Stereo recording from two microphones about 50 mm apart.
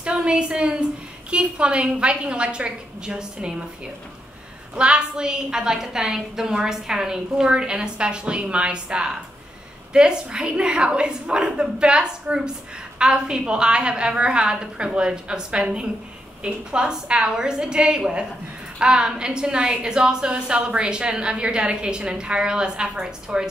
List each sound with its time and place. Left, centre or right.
0.0 s a woman's voice: right
4.7 s a woman's voice: centre